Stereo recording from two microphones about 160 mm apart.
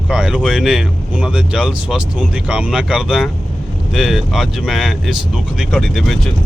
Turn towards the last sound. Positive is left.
turn(degrees=0)  # may be behind; listen again after turning